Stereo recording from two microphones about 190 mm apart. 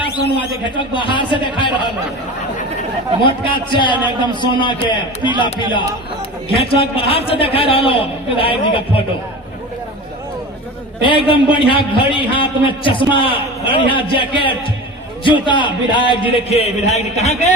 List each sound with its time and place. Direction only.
0.8 s a man's voice: 25° left (ahead or behind)
3.2 s a man's voice: 25° left (ahead or behind)
11.0 s a man's voice: 25° left (ahead or behind)